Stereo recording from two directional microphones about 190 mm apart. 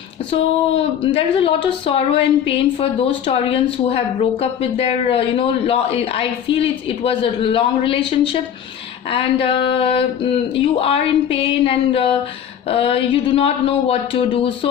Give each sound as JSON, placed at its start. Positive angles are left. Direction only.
{"t": 0.3, "sound": "speech", "side_deg": 30}